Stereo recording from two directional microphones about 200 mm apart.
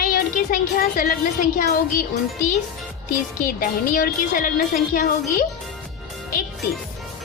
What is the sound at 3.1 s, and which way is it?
Speech, 45° left (ahead or behind).